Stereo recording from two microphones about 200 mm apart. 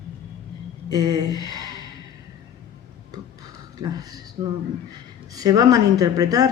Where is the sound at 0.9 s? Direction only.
20° right (ahead or behind).